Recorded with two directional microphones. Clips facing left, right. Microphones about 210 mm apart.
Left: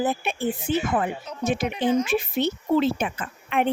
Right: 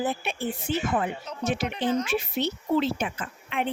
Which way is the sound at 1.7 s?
10° left (ahead or behind).